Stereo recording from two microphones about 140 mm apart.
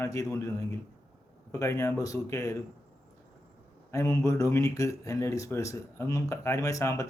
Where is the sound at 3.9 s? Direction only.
20° left (ahead or behind).